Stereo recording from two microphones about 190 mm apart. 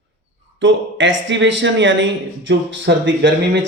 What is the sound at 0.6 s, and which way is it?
Speech, 80° right.